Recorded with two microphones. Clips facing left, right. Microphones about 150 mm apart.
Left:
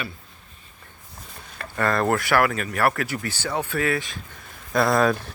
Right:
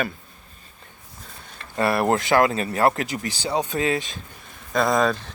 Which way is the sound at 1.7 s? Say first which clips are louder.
Right 1 dB; 15° right (ahead or behind).